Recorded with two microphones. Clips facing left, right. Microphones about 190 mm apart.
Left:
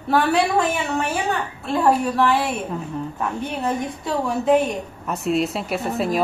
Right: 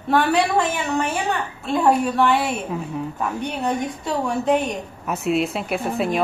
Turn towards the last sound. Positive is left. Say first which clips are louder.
# even
turn(degrees=0)  # may be behind; listen again after turning